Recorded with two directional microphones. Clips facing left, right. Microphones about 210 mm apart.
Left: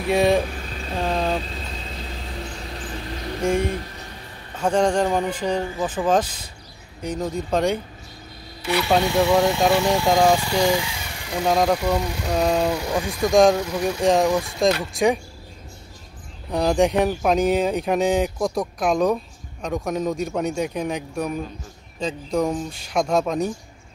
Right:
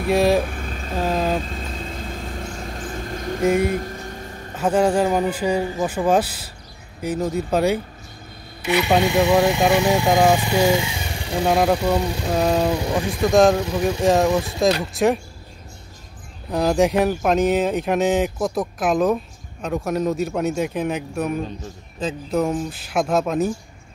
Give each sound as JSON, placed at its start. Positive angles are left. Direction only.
{"t": 0.1, "sound": "speech", "side_deg": 0}
{"t": 0.5, "sound": "vehicle", "side_deg": -50}
{"t": 0.9, "sound": "speech", "side_deg": -5}
{"t": 1.4, "sound": "vehicle", "side_deg": -50}
{"t": 3.6, "sound": "a sound", "side_deg": -45}
{"t": 4.6, "sound": "speech", "side_deg": -5}
{"t": 8.6, "sound": "speech", "side_deg": -20}
{"t": 11.4, "sound": "speech", "side_deg": -5}
{"t": 16.4, "sound": "speech", "side_deg": 0}